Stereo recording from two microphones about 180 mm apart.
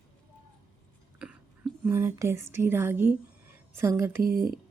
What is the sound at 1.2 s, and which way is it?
A woman's voice, 5° right (ahead or behind).